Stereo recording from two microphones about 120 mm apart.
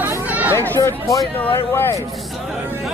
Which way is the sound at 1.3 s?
15° left (ahead or behind).